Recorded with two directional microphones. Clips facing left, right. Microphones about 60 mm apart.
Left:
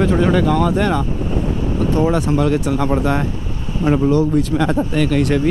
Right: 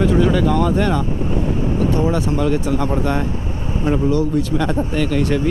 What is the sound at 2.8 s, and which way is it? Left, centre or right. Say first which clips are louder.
Speech: left 2 dB; centre.